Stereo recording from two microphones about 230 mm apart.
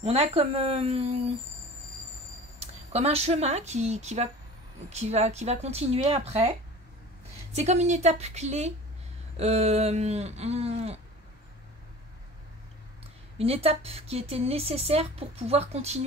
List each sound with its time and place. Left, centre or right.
0.0 s speech: right
2.6 s speech: right
7.5 s speech: right
13.4 s speech: right